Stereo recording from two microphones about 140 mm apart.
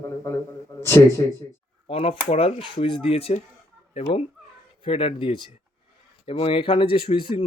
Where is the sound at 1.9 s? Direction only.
45° left (ahead or behind).